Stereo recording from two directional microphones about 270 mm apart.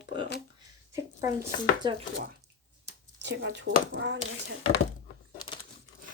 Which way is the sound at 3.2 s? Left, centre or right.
Right.